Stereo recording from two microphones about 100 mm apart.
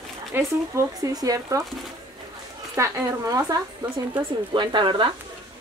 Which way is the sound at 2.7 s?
35° right (ahead or behind).